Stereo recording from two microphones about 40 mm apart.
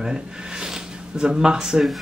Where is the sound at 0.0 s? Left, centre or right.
Centre.